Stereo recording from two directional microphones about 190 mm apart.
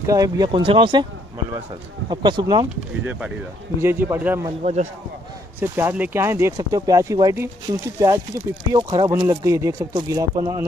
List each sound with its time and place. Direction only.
0.0 s speech: 20° right (ahead or behind)
2.0 s speech: 25° right (ahead or behind)
5.6 s speech: 10° right (ahead or behind)